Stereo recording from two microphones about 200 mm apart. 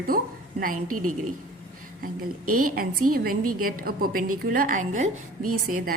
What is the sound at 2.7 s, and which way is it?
A woman's voice, 50° right (ahead or behind).